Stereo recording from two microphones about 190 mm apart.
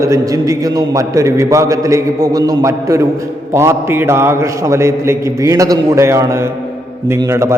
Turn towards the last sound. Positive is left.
turn(degrees=-15)  # may be behind; listen again after turning